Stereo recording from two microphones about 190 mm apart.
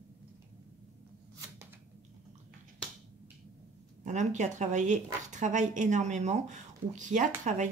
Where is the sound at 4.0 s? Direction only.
40° right (ahead or behind).